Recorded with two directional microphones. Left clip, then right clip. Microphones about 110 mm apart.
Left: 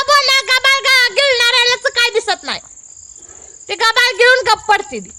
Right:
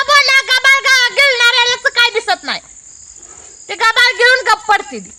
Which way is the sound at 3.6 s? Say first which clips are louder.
Right 2 dB; 45° left (ahead or behind).